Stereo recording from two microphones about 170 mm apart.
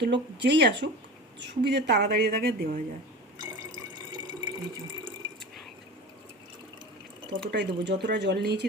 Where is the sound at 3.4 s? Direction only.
25° right (ahead or behind).